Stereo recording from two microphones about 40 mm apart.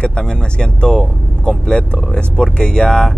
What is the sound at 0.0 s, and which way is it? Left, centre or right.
Speech, left.